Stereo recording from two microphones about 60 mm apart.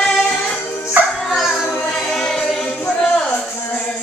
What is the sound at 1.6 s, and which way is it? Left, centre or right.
Music, centre.